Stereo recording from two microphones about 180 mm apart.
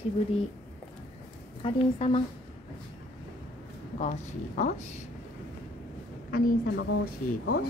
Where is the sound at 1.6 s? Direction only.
30° left (ahead or behind).